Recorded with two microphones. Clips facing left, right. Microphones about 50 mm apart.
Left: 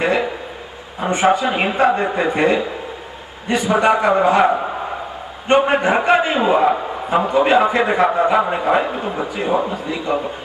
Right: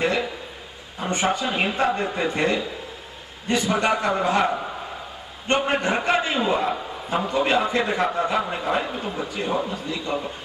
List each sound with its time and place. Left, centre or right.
0.0 s a man's voice: centre